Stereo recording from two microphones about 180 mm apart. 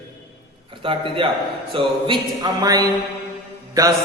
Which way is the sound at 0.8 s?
30° right (ahead or behind).